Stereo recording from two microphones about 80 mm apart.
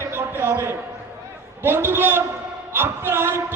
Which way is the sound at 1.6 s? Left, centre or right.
Right.